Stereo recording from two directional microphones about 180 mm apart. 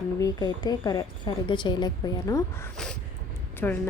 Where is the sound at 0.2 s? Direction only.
25° left (ahead or behind).